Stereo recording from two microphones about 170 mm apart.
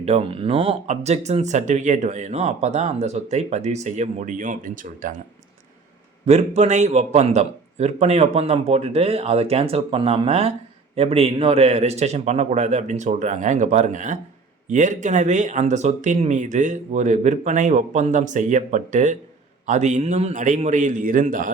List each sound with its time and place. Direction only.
0.0 s speech: 35° right (ahead or behind); by 5.1 s 50° right (ahead or behind)
6.2 s speech: 40° right (ahead or behind)